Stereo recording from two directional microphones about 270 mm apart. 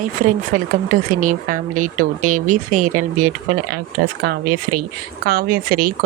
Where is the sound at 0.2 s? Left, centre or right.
Right.